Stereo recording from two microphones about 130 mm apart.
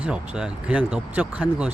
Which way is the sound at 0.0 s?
5° right (ahead or behind).